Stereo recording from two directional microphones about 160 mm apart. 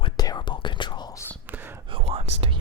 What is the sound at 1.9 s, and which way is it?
Whispering, 35° right (ahead or behind).